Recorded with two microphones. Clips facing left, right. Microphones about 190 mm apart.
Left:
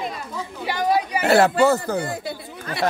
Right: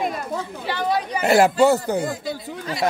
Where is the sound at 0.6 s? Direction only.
10° left (ahead or behind).